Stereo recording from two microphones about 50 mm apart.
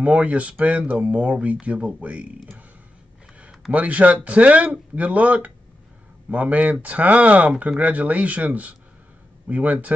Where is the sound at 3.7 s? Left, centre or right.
Right.